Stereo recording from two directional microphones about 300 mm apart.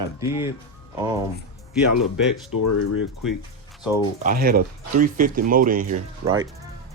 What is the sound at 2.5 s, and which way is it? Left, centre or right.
Speech, left.